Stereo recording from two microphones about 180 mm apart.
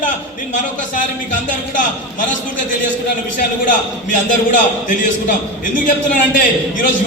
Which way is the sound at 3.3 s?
50° left (ahead or behind).